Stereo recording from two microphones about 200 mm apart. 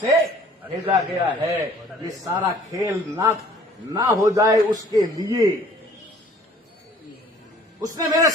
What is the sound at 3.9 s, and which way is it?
A man's voice, 15° right (ahead or behind).